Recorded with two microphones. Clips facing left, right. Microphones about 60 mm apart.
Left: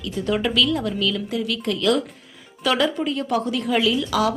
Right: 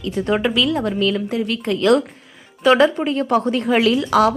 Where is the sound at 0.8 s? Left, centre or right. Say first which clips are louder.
Right 5 dB; right.